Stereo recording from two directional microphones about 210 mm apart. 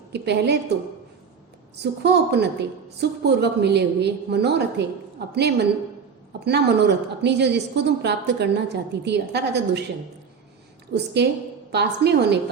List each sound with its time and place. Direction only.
0.1 s a woman's voice: 55° right (ahead or behind)
1.8 s a woman's voice: 50° right (ahead or behind)
10.9 s a woman's voice: 55° right (ahead or behind)